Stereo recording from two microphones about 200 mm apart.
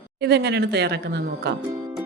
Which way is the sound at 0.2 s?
55° right (ahead or behind).